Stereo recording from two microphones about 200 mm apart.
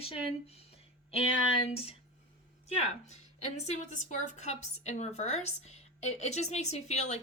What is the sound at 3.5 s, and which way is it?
A woman's voice, 35° left (ahead or behind).